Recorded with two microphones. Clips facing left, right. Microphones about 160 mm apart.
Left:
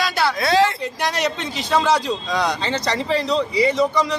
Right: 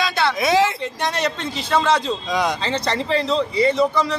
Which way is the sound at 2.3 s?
20° right (ahead or behind).